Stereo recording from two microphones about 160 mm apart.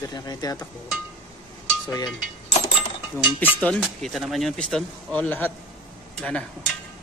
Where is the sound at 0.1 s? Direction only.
25° left (ahead or behind).